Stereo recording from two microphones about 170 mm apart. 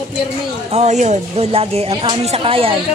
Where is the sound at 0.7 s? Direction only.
40° right (ahead or behind).